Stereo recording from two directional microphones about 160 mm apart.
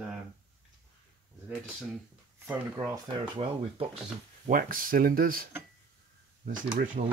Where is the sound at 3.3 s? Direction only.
35° right (ahead or behind).